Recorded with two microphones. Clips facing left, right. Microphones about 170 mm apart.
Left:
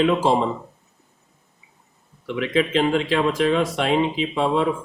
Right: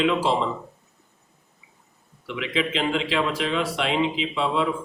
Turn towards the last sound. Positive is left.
turn(degrees=45)  # may be behind; listen again after turning